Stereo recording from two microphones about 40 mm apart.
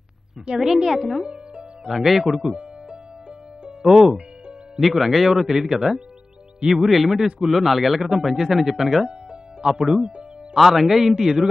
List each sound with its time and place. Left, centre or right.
0.5 s a woman's voice: right
0.8 s speech: centre
1.2 s music: right
1.9 s speech: centre
3.8 s speech: centre
9.0 s music: centre
10.5 s speech: centre